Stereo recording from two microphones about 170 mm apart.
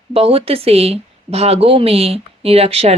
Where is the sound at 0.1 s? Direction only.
35° right (ahead or behind).